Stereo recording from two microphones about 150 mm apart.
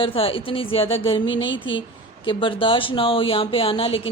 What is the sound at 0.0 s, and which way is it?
Speech, 35° left (ahead or behind).